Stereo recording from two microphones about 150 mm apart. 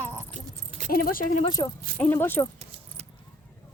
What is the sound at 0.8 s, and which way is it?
Speech, 75° left (ahead or behind).